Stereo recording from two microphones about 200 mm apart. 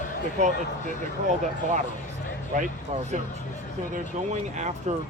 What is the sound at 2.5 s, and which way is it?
Speech, 40° right (ahead or behind).